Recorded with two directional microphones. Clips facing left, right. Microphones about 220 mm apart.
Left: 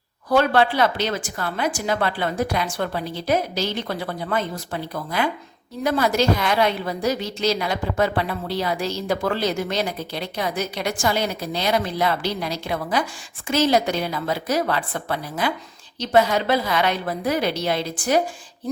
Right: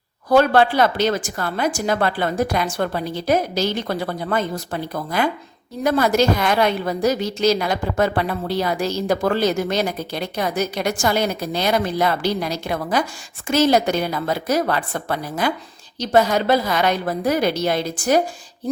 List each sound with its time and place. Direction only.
0.3 s a woman's voice: 45° right (ahead or behind)